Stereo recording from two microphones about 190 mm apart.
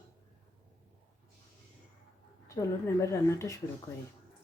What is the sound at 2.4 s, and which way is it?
Speech, 15° left (ahead or behind).